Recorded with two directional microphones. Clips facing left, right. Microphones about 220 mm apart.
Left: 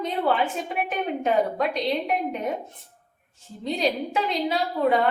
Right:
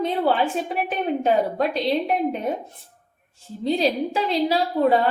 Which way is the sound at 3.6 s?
30° right (ahead or behind).